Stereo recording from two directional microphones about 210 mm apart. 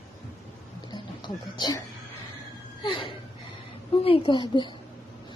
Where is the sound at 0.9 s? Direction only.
20° left (ahead or behind).